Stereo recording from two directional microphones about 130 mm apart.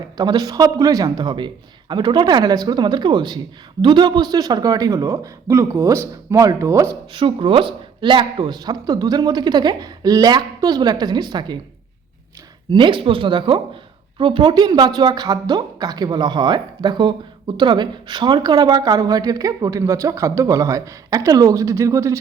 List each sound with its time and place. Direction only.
0.2 s a woman's voice: 30° right (ahead or behind)
7.1 s a woman's voice: 40° right (ahead or behind)
12.7 s a woman's voice: 40° right (ahead or behind); by 22.2 s 25° right (ahead or behind)